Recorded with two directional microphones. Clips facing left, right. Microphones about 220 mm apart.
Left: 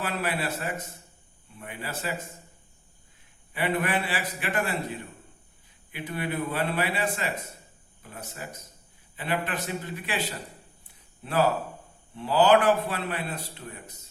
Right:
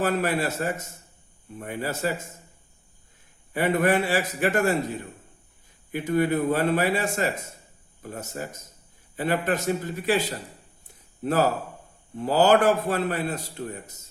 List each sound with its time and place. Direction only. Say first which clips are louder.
0.0 s a man's voice: right 6 dB; 45° right (ahead or behind)
3.5 s a man's voice: right 6 dB; 45° right (ahead or behind)